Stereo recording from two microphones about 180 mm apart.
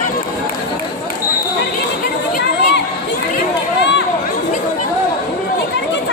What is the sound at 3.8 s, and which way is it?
Run, 75° left (ahead or behind).